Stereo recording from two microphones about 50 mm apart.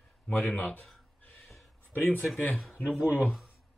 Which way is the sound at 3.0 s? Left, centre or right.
Left.